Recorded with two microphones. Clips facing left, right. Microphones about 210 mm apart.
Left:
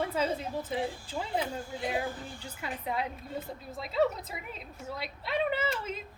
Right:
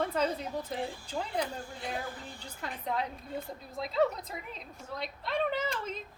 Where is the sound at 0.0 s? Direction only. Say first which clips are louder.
Even; 5° left (ahead or behind).